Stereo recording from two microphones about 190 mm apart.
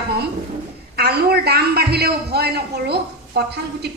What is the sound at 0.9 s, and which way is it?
A man's voice, 55° right (ahead or behind).